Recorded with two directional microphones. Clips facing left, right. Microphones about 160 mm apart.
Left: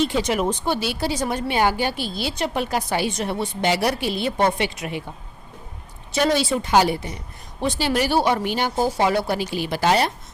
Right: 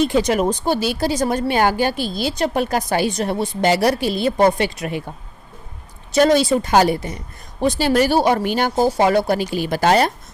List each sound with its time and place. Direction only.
0.0 s a woman's voice: 45° right (ahead or behind)
6.1 s speech: 40° right (ahead or behind)